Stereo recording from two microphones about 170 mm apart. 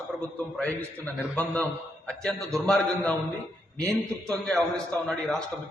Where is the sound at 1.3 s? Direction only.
10° left (ahead or behind).